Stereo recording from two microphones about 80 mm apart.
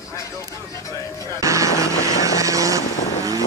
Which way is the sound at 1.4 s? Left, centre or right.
Right.